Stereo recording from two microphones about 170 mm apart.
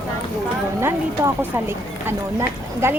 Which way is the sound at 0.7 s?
15° right (ahead or behind).